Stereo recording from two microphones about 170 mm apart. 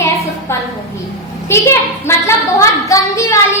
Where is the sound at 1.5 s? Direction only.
15° left (ahead or behind).